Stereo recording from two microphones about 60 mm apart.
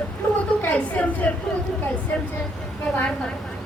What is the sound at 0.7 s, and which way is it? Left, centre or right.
Speech, left.